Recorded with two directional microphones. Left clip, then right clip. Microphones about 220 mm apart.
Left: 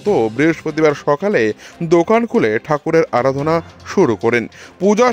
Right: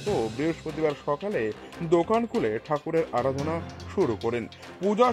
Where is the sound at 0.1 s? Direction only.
45° left (ahead or behind).